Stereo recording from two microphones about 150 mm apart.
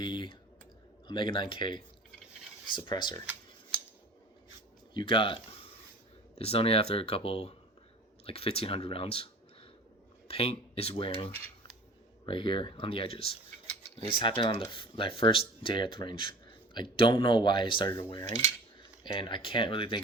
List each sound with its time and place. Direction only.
0.0 s speech: 30° left (ahead or behind)
4.9 s speech: 35° left (ahead or behind)
18.2 s cutlery: 25° left (ahead or behind)
19.0 s speech: 30° left (ahead or behind)